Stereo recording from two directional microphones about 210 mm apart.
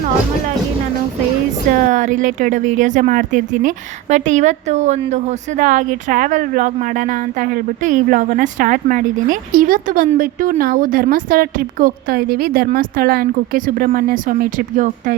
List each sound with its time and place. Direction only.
1.9 s speech: 35° right (ahead or behind)